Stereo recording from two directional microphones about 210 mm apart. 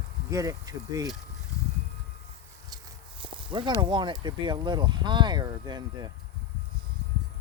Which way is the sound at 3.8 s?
20° right (ahead or behind).